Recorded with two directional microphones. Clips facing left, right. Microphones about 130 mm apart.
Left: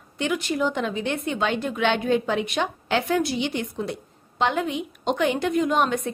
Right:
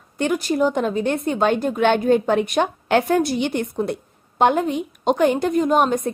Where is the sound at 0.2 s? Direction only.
40° right (ahead or behind).